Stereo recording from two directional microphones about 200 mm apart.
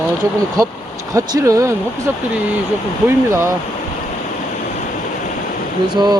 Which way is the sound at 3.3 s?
15° right (ahead or behind).